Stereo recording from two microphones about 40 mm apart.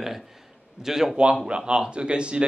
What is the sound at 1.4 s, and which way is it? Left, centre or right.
Speech, right.